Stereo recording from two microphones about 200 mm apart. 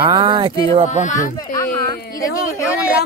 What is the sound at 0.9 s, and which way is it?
Speech, 35° left (ahead or behind).